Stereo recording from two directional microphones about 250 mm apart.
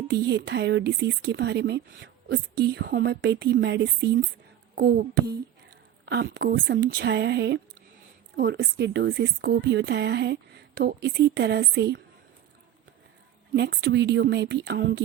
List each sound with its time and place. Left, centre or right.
0.1 s speech: right
13.5 s speech: right